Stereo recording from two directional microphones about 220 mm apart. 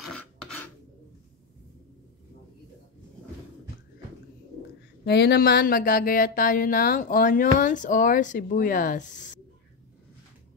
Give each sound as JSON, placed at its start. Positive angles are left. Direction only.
{"t": 0.0, "sound": "filing", "side_deg": 0}
{"t": 5.0, "sound": "speech", "side_deg": 50}